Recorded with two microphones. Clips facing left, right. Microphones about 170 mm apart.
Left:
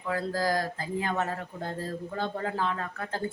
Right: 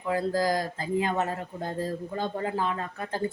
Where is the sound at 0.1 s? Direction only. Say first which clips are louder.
Right 3 dB; 15° right (ahead or behind).